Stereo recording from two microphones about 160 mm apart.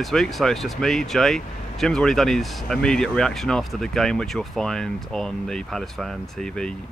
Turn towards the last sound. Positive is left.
turn(degrees=0)  # may be behind; listen again after turning